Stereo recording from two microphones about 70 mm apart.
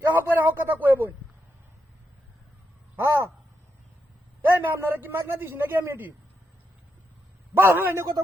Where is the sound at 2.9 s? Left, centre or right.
Right.